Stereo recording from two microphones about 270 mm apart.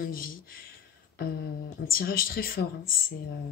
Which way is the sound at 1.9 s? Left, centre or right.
Left.